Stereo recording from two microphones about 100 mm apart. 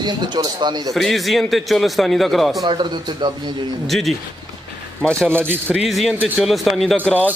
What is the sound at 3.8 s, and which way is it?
Speech, centre (ahead or behind).